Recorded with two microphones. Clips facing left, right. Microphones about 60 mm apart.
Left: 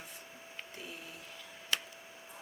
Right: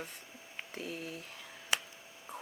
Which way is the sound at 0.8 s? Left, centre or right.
Right.